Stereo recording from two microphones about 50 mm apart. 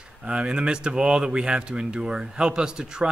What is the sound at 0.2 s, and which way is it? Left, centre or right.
Speech, right.